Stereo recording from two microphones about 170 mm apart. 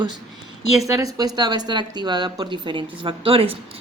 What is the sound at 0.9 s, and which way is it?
A woman's voice, 20° right (ahead or behind).